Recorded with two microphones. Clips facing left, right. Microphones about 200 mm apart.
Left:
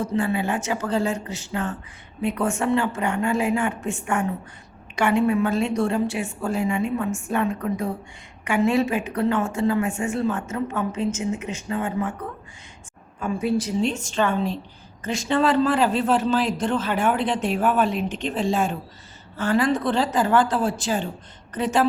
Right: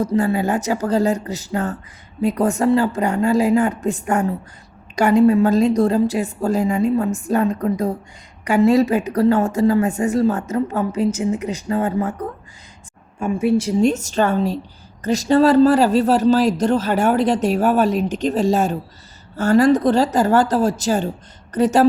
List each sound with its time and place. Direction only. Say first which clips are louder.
0.0 s speech: right 5 dB; 40° right (ahead or behind)
13.1 s speech: right 5 dB; 25° right (ahead or behind)
13.8 s speech: right 6 dB; 40° right (ahead or behind)